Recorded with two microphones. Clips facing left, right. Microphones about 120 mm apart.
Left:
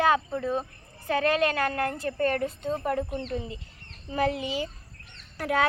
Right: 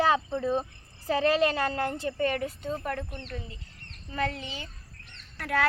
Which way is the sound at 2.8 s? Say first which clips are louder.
Left 5 dB; 10° left (ahead or behind).